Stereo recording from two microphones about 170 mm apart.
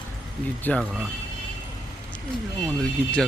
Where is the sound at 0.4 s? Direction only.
10° left (ahead or behind).